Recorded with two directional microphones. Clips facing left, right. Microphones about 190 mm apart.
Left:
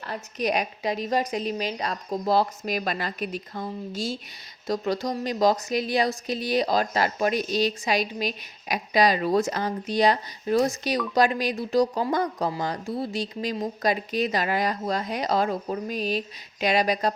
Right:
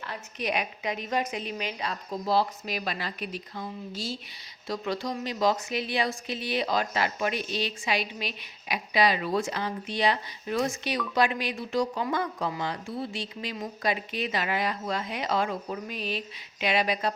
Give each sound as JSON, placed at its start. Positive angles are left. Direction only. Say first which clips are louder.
{"t": 0.1, "sound": "a woman's voice", "louder": "left 5 dB", "side_deg": 40}